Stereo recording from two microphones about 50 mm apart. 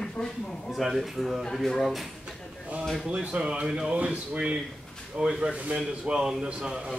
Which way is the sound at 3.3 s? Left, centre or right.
Centre.